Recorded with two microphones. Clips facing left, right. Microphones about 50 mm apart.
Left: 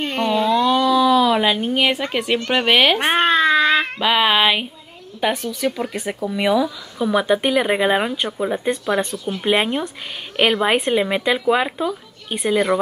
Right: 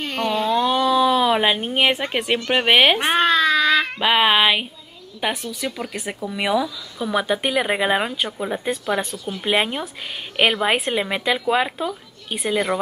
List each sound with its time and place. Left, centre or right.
0.0 s a sound: left
0.5 s speech: right
3.0 s baby cry: left
4.0 s a sound: centre
5.2 s speech: centre
5.6 s speech: centre
9.1 s speech: left
9.4 s speech: centre